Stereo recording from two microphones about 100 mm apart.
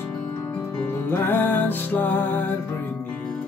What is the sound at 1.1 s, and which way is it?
Music, 20° left (ahead or behind).